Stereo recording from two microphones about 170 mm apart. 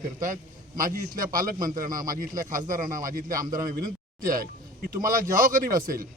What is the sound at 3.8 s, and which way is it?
A man's voice, 55° right (ahead or behind).